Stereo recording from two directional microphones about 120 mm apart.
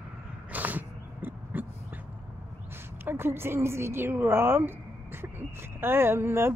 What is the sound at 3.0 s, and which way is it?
A woman's voice, 20° right (ahead or behind).